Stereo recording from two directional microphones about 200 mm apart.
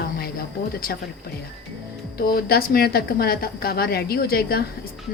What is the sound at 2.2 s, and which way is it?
A woman's voice, 50° left (ahead or behind).